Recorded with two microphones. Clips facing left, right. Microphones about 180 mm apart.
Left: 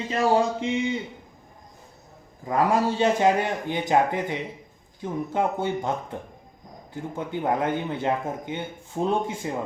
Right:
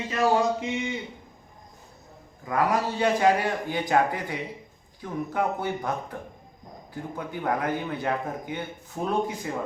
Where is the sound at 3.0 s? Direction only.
20° left (ahead or behind).